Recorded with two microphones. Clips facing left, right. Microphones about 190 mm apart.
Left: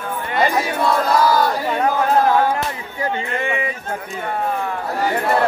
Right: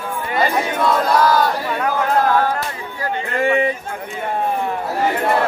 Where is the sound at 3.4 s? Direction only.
35° right (ahead or behind).